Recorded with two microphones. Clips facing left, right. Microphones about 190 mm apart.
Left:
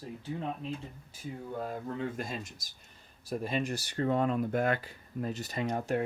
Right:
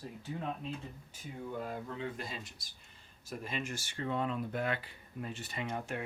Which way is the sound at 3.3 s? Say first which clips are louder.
Left 7 dB; 35° left (ahead or behind).